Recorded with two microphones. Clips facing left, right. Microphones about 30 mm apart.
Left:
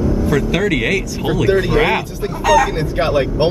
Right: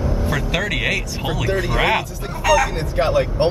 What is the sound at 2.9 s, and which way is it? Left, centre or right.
Speech, left.